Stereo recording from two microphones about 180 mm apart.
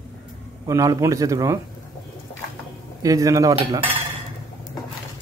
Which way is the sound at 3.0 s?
20° right (ahead or behind).